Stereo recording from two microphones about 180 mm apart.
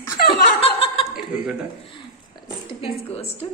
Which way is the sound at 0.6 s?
30° left (ahead or behind).